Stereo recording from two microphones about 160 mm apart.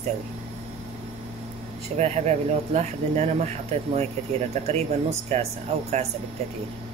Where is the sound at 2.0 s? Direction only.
45° right (ahead or behind).